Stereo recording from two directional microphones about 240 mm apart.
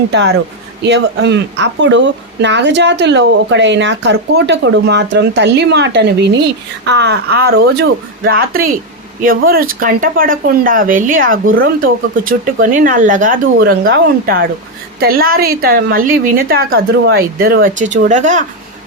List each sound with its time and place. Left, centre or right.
0.1 s a woman's voice: right